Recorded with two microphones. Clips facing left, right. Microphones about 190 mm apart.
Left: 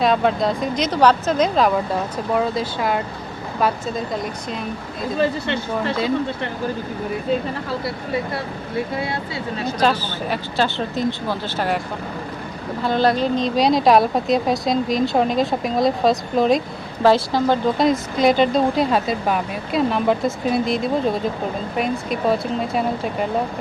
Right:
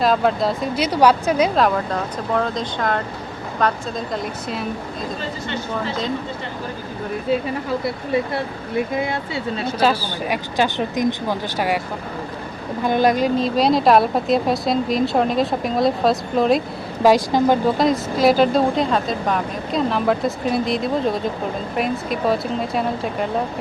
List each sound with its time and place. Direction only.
0.0 s a woman's voice: centre (ahead or behind)
1.5 s speech: 5° left (ahead or behind)
7.3 s a woman's voice: 5° right (ahead or behind)
9.0 s speech: 25° right (ahead or behind)
9.8 s speech: 10° right (ahead or behind)
12.8 s a woman's voice: 15° right (ahead or behind)
17.7 s a woman's voice: centre (ahead or behind)